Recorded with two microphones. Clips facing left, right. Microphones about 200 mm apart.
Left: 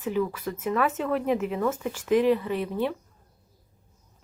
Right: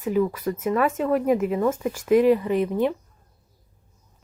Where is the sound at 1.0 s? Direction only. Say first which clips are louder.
Right 5 dB; 40° right (ahead or behind).